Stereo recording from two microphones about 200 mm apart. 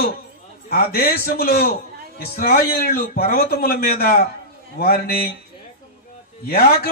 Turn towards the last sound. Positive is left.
turn(degrees=50)  # may be behind; listen again after turning